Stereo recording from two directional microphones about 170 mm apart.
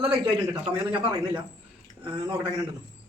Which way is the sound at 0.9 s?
30° right (ahead or behind).